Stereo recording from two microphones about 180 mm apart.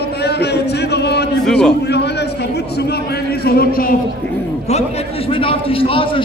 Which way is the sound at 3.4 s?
60° left (ahead or behind).